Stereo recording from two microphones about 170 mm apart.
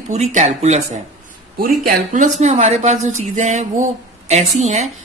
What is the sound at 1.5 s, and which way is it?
A woman's voice, 55° right (ahead or behind).